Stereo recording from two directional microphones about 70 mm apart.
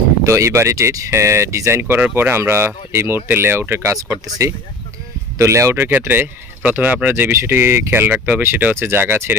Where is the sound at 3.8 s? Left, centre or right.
Right.